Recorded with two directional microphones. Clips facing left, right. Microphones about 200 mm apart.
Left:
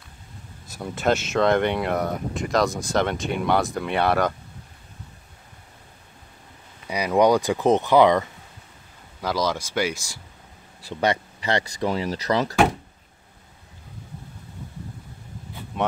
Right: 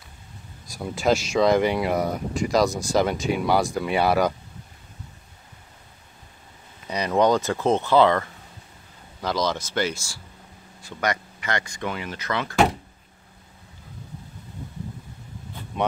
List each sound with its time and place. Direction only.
0.8 s speech: centre (ahead or behind)
6.9 s speech: 10° left (ahead or behind)
10.8 s speech: 30° left (ahead or behind)
15.7 s speech: centre (ahead or behind)